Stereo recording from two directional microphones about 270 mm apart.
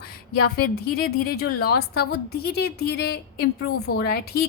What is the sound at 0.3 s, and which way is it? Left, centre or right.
A woman's voice, left.